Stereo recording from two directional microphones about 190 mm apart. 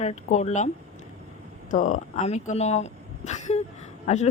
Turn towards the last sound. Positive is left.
turn(degrees=35)  # may be behind; listen again after turning